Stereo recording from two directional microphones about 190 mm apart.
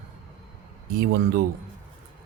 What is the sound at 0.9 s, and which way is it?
Speech, 50° right (ahead or behind).